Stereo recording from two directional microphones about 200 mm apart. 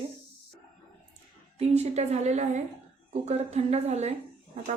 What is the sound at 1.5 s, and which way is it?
A woman's voice, 35° right (ahead or behind).